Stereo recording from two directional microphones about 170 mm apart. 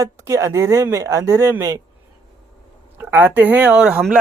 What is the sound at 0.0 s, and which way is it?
Speech, 20° right (ahead or behind).